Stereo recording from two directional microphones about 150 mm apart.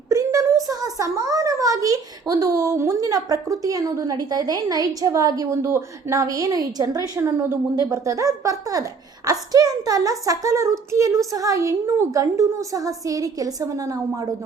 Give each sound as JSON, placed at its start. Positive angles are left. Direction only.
{"t": 0.1, "sound": "a child's voice", "side_deg": -20}